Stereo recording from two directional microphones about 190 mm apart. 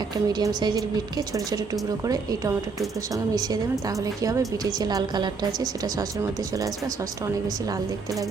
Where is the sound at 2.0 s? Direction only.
20° right (ahead or behind).